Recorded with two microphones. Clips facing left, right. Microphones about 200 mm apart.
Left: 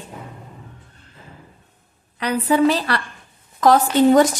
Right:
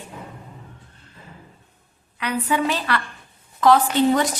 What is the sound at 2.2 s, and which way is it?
A woman's voice, 35° left (ahead or behind).